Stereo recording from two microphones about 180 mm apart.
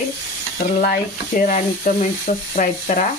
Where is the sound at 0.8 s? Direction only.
50° left (ahead or behind).